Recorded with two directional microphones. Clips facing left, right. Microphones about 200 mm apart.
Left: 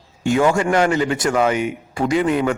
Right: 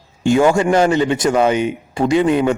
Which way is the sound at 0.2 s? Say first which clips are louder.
Right 3 dB; 30° right (ahead or behind).